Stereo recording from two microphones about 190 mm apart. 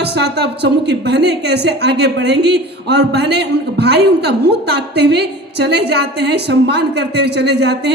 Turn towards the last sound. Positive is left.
turn(degrees=-60)  # may be behind; listen again after turning